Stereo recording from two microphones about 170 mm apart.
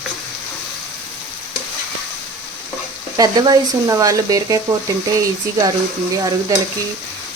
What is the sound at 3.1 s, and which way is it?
Stir, 20° right (ahead or behind).